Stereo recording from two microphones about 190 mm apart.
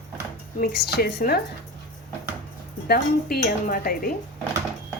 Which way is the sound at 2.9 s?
55° left (ahead or behind).